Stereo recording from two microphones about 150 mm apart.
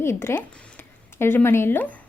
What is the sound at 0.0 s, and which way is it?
A woman's voice, 15° left (ahead or behind).